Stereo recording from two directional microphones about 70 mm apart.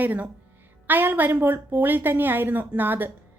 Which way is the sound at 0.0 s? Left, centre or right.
Right.